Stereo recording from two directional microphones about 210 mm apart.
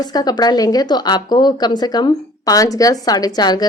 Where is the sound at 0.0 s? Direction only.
20° left (ahead or behind).